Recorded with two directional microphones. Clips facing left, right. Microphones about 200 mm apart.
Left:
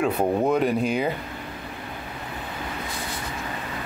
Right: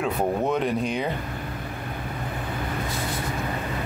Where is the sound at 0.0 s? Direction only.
5° left (ahead or behind).